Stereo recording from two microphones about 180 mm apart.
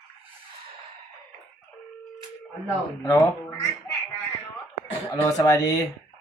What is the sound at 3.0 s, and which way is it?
Speech, 20° left (ahead or behind).